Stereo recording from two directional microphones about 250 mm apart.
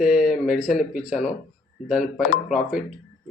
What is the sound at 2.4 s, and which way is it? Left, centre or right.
Speech, centre.